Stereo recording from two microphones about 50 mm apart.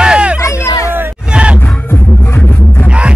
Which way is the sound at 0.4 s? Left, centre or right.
Left.